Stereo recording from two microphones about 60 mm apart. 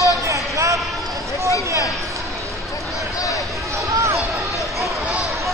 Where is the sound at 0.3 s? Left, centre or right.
Right.